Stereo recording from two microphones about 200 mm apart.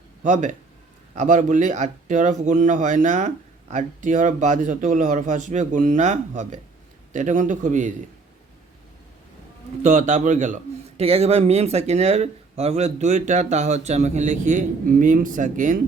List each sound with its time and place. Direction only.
0.2 s a man's voice: 40° right (ahead or behind)
9.8 s a man's voice: 35° right (ahead or behind)